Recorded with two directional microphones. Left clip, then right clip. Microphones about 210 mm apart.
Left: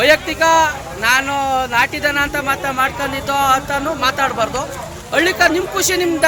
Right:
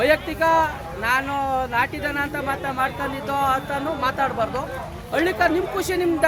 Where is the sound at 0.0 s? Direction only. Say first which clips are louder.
Left 6 dB; 5° left (ahead or behind).